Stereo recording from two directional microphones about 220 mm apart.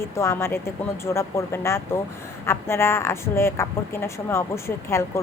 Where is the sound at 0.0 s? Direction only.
10° left (ahead or behind).